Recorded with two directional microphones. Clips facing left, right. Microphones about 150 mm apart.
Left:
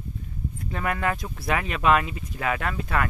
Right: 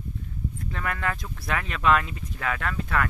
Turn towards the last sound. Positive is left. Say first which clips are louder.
# left 1 dB
turn(degrees=10)  # may be behind; listen again after turning